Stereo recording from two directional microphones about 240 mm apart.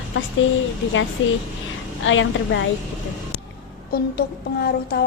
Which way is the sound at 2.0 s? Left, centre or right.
Left.